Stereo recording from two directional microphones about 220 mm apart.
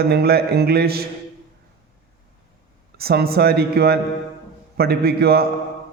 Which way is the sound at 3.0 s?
45° right (ahead or behind).